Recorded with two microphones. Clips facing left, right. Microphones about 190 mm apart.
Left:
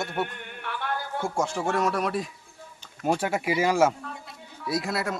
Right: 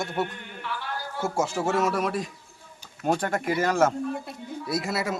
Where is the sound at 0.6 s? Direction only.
55° left (ahead or behind).